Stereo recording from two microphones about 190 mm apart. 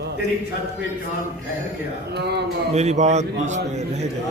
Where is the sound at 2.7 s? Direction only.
35° right (ahead or behind).